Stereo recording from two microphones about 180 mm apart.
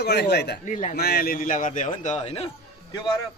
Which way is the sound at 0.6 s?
45° left (ahead or behind).